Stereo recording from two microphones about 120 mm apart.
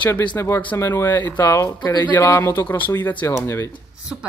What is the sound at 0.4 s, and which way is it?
Speech, 20° left (ahead or behind).